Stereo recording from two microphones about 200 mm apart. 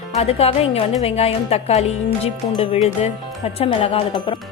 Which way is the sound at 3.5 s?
30° left (ahead or behind).